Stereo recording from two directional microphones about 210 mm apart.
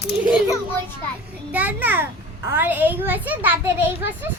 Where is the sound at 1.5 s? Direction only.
5° right (ahead or behind).